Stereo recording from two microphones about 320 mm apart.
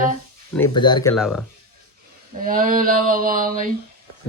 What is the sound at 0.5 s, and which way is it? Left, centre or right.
Speech, centre.